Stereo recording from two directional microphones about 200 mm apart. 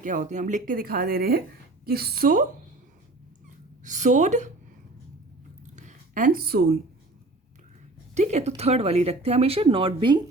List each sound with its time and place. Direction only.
0.0 s speech: 40° right (ahead or behind)
3.8 s speech: 35° right (ahead or behind)
5.7 s a sound: 40° right (ahead or behind)
8.1 s speech: 35° right (ahead or behind)